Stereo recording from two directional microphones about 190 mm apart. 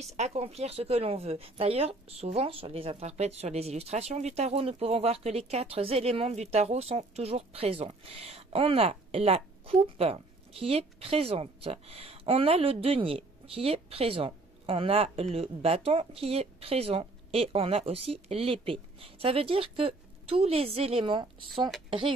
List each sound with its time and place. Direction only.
0.0 s speech: 35° right (ahead or behind)